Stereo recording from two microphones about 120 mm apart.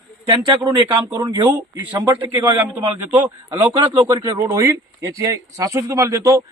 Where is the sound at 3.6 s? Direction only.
40° right (ahead or behind).